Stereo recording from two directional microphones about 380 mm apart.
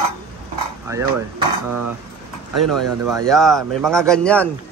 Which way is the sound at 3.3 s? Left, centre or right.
Centre.